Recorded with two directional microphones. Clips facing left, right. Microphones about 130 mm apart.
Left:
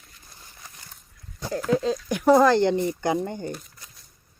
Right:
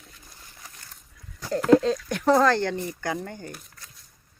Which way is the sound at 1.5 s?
70° right (ahead or behind).